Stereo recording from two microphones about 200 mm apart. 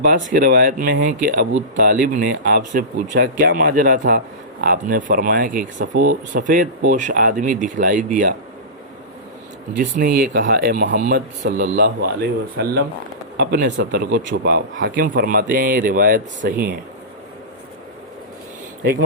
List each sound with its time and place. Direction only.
0.0 s speech: 50° right (ahead or behind)
9.7 s speech: 50° right (ahead or behind)
13.3 s speech: 60° right (ahead or behind)